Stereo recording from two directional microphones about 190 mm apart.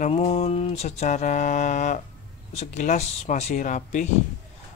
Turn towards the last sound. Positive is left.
turn(degrees=40)  # may be behind; listen again after turning